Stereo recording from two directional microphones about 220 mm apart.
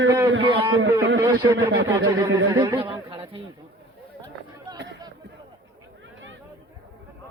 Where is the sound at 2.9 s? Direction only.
25° right (ahead or behind).